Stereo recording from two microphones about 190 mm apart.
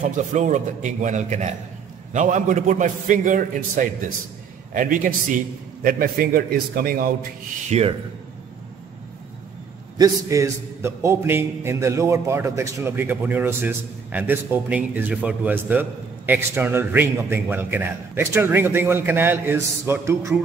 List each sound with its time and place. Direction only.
0.0 s a man's voice: 40° right (ahead or behind)
7.7 s a man's voice: 35° right (ahead or behind)
9.9 s a man's voice: 15° right (ahead or behind)